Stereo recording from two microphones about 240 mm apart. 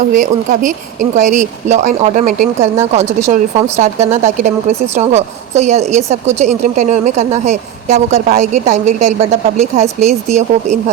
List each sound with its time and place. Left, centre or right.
0.1 s a woman's voice: right